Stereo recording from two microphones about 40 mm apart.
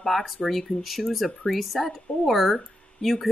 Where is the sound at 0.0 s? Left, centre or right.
Centre.